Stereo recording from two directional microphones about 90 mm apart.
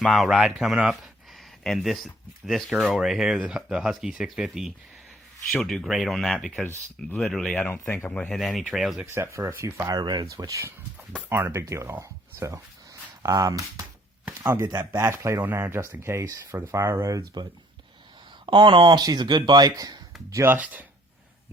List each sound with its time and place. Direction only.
0.0 s speech: 5° left (ahead or behind)
7.7 s speech: 25° left (ahead or behind)
8.1 s speech: 10° left (ahead or behind)
8.4 s speech: centre (ahead or behind)
9.0 s speech: 30° right (ahead or behind)
9.9 s speech: 50° right (ahead or behind); by 10.8 s 35° right (ahead or behind)
11.3 s speech: 25° right (ahead or behind)
16.6 s speech: 30° right (ahead or behind)
17.1 s speech: 40° right (ahead or behind)
18.4 s speech: 65° right (ahead or behind); by 20.0 s 45° right (ahead or behind)
20.3 s speech: 25° right (ahead or behind)